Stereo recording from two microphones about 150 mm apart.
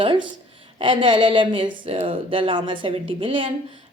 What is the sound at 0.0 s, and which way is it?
Speech, 35° right (ahead or behind).